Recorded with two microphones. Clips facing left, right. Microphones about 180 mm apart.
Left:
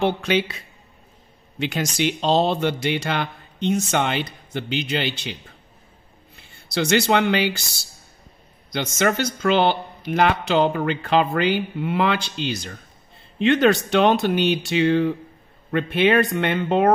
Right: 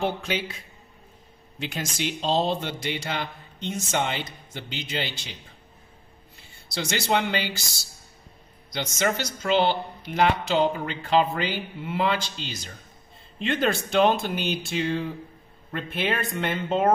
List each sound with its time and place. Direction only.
0.0 s speech: 75° left (ahead or behind)
6.7 s speech: 65° left (ahead or behind)
8.6 s speech: 60° left (ahead or behind)